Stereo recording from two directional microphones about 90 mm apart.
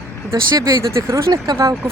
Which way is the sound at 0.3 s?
35° right (ahead or behind).